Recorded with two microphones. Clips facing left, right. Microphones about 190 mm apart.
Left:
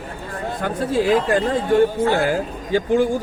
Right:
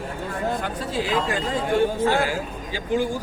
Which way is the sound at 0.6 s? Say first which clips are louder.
Left 7 dB; 50° left (ahead or behind).